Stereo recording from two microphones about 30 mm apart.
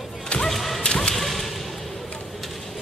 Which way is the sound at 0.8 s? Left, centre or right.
Left.